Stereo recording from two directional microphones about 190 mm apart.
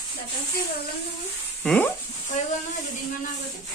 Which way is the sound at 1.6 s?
10° left (ahead or behind).